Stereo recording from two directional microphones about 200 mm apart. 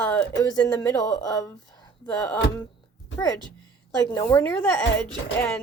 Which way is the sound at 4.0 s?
10° left (ahead or behind).